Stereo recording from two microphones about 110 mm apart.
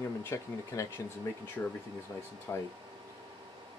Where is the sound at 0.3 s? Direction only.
20° left (ahead or behind).